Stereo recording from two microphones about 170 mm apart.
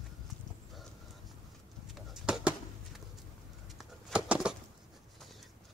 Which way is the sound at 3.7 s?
5° right (ahead or behind).